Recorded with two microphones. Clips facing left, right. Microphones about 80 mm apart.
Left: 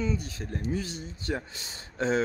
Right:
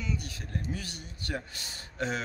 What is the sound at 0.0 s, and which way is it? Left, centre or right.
Speech, left.